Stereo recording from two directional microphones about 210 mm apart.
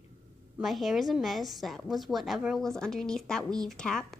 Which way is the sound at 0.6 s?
Centre (ahead or behind).